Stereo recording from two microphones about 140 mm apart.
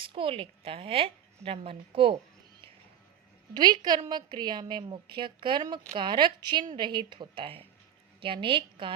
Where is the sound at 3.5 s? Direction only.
30° right (ahead or behind).